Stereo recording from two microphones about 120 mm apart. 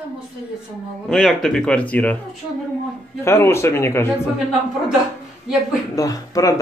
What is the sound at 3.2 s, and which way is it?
Speech, 20° left (ahead or behind).